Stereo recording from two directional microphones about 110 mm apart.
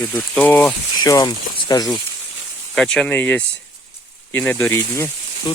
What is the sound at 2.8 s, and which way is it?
Speech, 5° left (ahead or behind).